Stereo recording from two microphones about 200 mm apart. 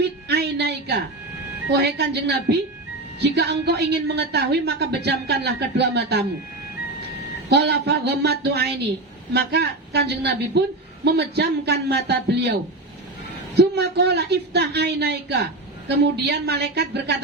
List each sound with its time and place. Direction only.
0.0 s a sound: 55° right (ahead or behind)
1.7 s speech: 55° right (ahead or behind)
7.5 s speech: 55° right (ahead or behind)
13.6 s speech: 55° right (ahead or behind)